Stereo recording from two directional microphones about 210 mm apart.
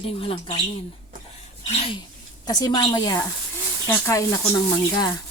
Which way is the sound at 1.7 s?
25° left (ahead or behind).